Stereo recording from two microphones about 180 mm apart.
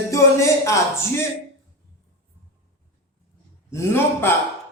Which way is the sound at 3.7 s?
10° left (ahead or behind).